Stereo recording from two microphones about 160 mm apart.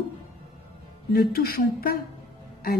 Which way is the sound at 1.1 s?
70° left (ahead or behind).